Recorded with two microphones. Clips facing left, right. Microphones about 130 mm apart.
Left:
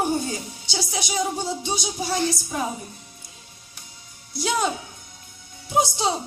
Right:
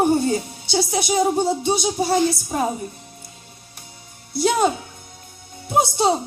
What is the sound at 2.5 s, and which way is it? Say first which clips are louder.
Speech: right 5 dB; 40° right (ahead or behind).